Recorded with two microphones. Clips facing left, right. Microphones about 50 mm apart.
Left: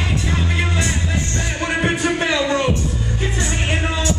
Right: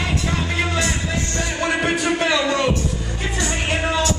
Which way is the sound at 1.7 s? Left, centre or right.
Left.